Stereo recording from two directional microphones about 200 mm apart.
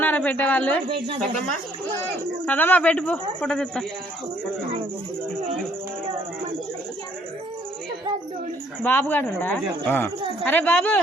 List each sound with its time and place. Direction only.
0.0 s a man's voice: 10° left (ahead or behind)
0.9 s speech: 25° right (ahead or behind)
2.5 s a man's voice: 10° left (ahead or behind)
8.8 s a man's voice: 10° left (ahead or behind)